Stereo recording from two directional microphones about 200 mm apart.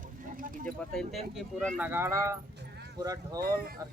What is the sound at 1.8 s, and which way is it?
Speech, 10° right (ahead or behind).